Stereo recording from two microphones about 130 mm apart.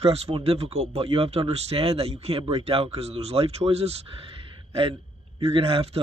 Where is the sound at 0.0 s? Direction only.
50° right (ahead or behind).